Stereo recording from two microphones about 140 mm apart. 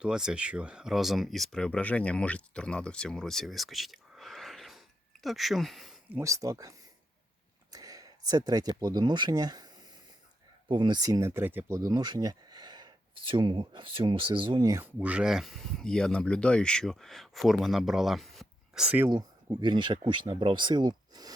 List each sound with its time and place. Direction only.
0.0 s speech: 5° right (ahead or behind)
6.1 s speech: 20° right (ahead or behind)
10.7 s speech: 35° right (ahead or behind); by 11.8 s 15° right (ahead or behind)
11.8 s speech: 25° right (ahead or behind)
14.7 s speech: 15° right (ahead or behind)
19.1 s speech: 30° right (ahead or behind)